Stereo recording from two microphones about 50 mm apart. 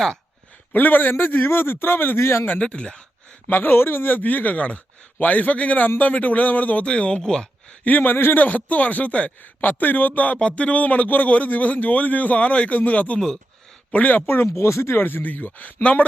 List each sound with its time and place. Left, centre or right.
0.7 s a man's voice: left
2.6 s speech: left
3.5 s a man's voice: left
6.8 s speech: left
7.9 s a man's voice: left
13.1 s speech: centre
13.9 s a man's voice: left
14.4 s speech: left
14.9 s a man's voice: left